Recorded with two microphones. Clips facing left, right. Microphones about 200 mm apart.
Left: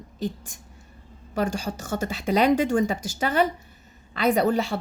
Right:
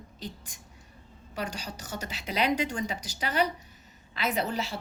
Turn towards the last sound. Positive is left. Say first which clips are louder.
# left 9 dB
turn(degrees=45)  # may be behind; listen again after turning